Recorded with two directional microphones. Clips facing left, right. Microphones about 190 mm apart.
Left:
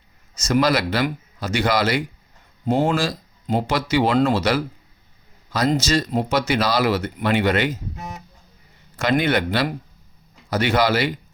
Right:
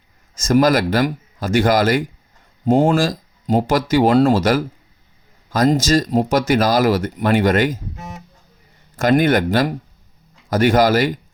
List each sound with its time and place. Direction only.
0.4 s speech: 45° right (ahead or behind)
9.0 s speech: 45° right (ahead or behind)